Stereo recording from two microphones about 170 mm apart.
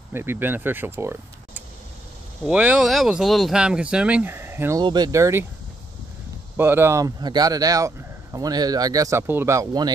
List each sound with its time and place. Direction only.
0.1 s speech: 15° right (ahead or behind)
2.4 s speech: 5° right (ahead or behind)
6.5 s speech: 15° right (ahead or behind)